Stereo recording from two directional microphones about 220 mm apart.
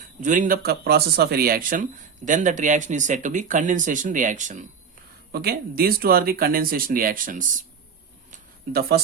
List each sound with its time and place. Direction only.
0.2 s speech: 35° right (ahead or behind)
5.3 s speech: 45° right (ahead or behind)
8.3 s a sound: 45° right (ahead or behind)